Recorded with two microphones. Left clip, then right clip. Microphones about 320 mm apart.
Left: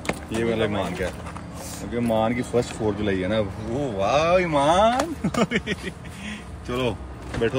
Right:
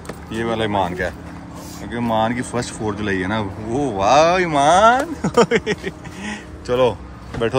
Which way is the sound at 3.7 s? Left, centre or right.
Right.